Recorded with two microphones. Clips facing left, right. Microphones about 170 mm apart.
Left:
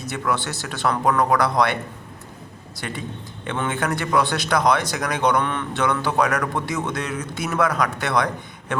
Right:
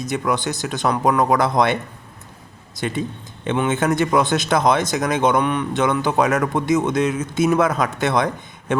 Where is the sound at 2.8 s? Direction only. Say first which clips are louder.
Right 7 dB; 20° right (ahead or behind).